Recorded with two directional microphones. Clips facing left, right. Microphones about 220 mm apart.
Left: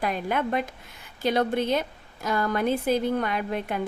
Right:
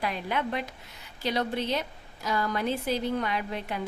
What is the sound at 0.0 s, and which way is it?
A woman's voice, 50° left (ahead or behind).